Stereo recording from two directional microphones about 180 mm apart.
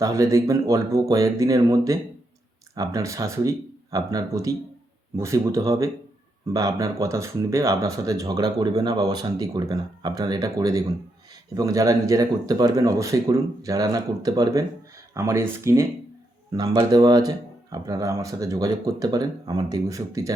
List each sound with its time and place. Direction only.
0.0 s speech: 20° right (ahead or behind)